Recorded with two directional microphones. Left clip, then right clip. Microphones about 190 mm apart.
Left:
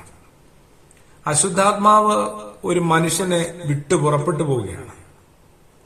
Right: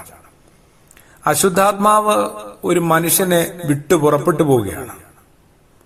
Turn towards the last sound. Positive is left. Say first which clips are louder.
# right 7 dB
turn(degrees=-40)  # may be behind; listen again after turning